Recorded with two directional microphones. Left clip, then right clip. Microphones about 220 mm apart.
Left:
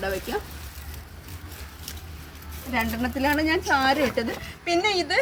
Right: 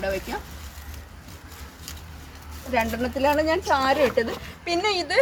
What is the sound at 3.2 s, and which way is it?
A woman's voice, 10° right (ahead or behind).